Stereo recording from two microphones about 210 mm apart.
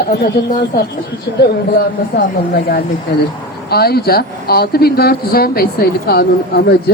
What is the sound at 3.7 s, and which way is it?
Speech, 50° left (ahead or behind).